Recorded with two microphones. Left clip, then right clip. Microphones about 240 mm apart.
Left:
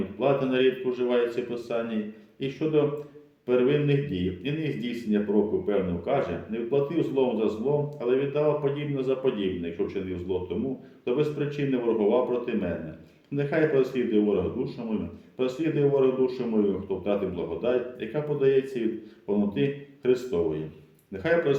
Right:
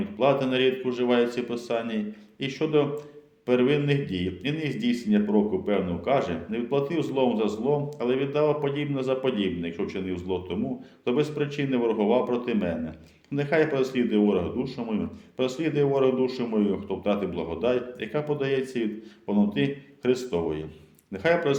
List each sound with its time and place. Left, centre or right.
0.2 s a man's voice: right